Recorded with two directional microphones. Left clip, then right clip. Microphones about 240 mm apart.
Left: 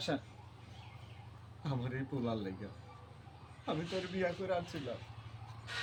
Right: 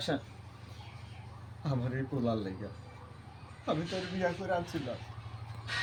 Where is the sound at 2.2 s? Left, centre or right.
Centre.